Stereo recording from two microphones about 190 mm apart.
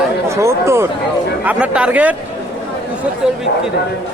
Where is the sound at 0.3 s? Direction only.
15° right (ahead or behind).